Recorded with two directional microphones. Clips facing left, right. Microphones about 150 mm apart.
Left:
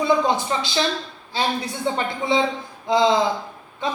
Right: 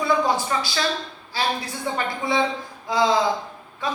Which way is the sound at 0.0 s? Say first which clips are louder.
Left 2 dB; 20° left (ahead or behind).